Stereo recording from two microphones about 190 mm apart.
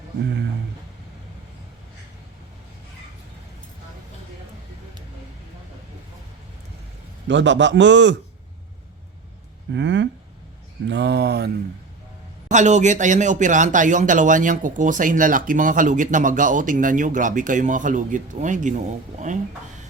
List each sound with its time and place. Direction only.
7.3 s a man's voice: 70° right (ahead or behind)
9.7 s a sound: 70° right (ahead or behind)
10.8 s speech: 65° right (ahead or behind)
12.5 s speech: 40° right (ahead or behind)